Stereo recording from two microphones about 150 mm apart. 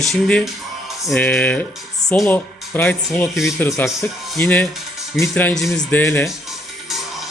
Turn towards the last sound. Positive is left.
turn(degrees=0)  # may be behind; listen again after turning